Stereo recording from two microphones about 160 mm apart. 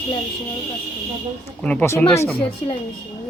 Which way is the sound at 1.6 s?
10° left (ahead or behind).